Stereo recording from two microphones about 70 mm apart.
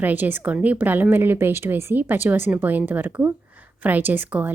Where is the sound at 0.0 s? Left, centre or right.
Right.